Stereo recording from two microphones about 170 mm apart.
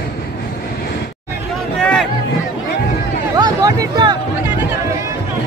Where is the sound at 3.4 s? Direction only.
25° right (ahead or behind).